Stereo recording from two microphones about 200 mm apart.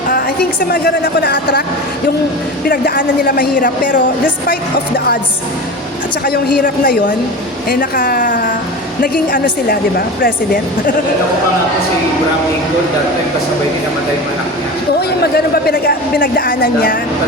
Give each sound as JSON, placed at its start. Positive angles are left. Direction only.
{"t": 0.7, "sound": "speech", "side_deg": 55}
{"t": 2.6, "sound": "speech", "side_deg": 45}
{"t": 6.2, "sound": "speech", "side_deg": 45}
{"t": 15.2, "sound": "speech", "side_deg": 50}